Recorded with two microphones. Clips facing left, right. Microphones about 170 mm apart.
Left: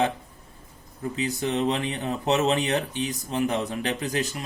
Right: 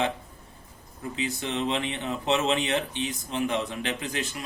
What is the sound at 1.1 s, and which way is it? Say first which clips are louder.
Speech: left 4 dB; 40° left (ahead or behind).